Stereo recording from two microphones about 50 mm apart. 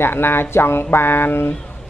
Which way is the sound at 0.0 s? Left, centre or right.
Left.